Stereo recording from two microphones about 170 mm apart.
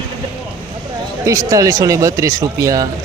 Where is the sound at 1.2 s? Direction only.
20° right (ahead or behind).